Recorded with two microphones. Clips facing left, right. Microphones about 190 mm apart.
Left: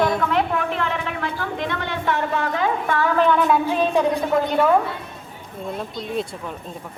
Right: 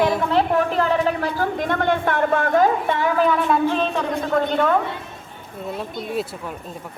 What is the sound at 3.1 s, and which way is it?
Speech, 5° right (ahead or behind).